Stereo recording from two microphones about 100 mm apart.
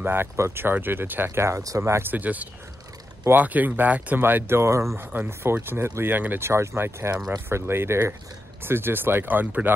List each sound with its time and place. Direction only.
0.0 s speech: 20° right (ahead or behind)